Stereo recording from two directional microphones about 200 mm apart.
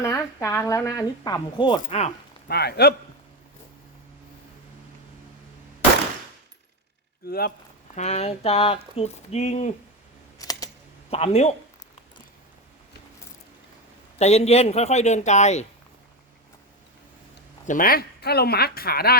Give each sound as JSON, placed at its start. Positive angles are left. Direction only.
{"t": 0.0, "sound": "speech", "side_deg": 15}
{"t": 2.5, "sound": "speech", "side_deg": 55}
{"t": 7.3, "sound": "speech", "side_deg": 50}
{"t": 7.9, "sound": "speech", "side_deg": 35}
{"t": 10.3, "sound": "typing", "side_deg": 20}
{"t": 11.1, "sound": "speech", "side_deg": 30}
{"t": 14.2, "sound": "speech", "side_deg": 30}
{"t": 17.7, "sound": "speech", "side_deg": 45}